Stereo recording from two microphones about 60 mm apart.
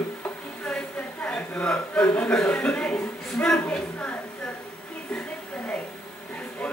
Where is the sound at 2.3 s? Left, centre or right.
Centre.